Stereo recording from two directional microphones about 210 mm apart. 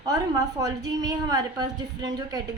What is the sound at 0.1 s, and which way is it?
A woman's voice, 15° right (ahead or behind).